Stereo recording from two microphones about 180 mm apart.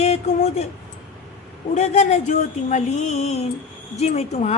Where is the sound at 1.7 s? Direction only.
40° left (ahead or behind).